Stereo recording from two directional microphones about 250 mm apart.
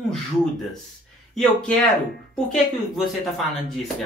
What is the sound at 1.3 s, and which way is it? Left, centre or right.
Speech, centre.